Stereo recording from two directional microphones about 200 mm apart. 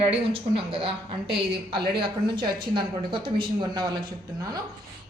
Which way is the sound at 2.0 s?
25° right (ahead or behind).